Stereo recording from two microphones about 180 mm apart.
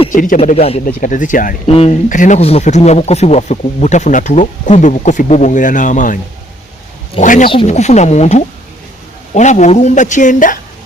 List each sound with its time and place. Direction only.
0.1 s speech: 45° left (ahead or behind)
0.3 s speech: 35° left (ahead or behind)
1.0 s a man's voice: 45° left (ahead or behind)
1.6 s speech: 35° left (ahead or behind)
2.0 s speech: 45° left (ahead or behind)
7.2 s a man's voice: 45° left (ahead or behind)